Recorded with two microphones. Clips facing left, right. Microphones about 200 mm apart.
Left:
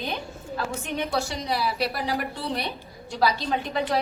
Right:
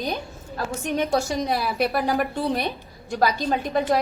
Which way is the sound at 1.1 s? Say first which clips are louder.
Right 4 dB; 50° right (ahead or behind).